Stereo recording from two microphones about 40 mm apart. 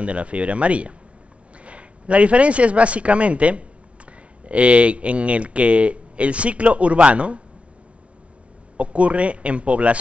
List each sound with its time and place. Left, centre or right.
0.0 s speech: right
8.7 s speech: right